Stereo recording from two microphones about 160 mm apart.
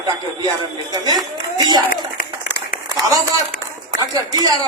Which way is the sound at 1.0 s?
25° right (ahead or behind).